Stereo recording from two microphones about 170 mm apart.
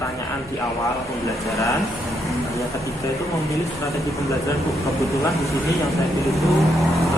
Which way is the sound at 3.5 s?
20° left (ahead or behind).